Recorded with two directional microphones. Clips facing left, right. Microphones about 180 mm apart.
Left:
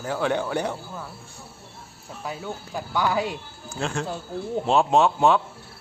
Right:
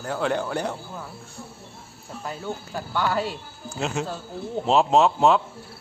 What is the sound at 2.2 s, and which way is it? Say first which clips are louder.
Speech: right 1 dB; 5° left (ahead or behind).